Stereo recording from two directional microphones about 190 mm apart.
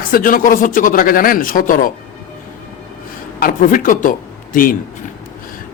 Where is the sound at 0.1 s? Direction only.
50° left (ahead or behind).